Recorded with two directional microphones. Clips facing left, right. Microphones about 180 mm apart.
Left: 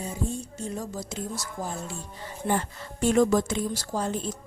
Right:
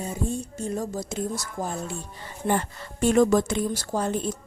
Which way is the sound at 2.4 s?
60° right (ahead or behind).